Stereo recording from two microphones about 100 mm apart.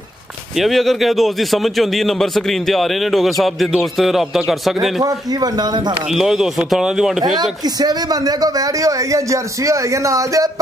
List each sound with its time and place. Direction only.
0.6 s a man's voice: centre (ahead or behind)
5.0 s speech: 40° right (ahead or behind)
6.1 s a man's voice: 5° right (ahead or behind)
7.6 s a man's voice: 40° right (ahead or behind)